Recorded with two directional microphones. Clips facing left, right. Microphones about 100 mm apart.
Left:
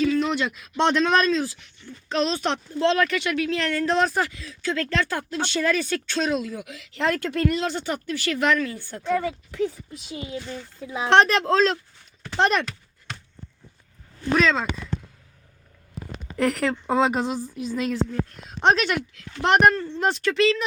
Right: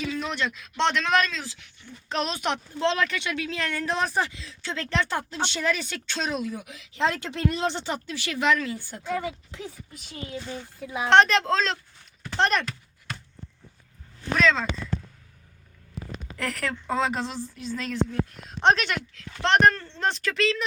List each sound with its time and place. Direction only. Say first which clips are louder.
0.0 s a sound: left 9 dB; 10° right (ahead or behind)
0.3 s a man's voice: left 4 dB; 5° left (ahead or behind)
0.8 s speech: left 3 dB; 20° left (ahead or behind)
2.0 s a woman's voice: left 4 dB; 15° right (ahead or behind)
9.9 s speech: left 4 dB; 5° left (ahead or behind)
14.3 s speech: left 2 dB; 5° left (ahead or behind)
16.4 s a woman's voice: left 8 dB; 20° left (ahead or behind); by 20.7 s centre (ahead or behind)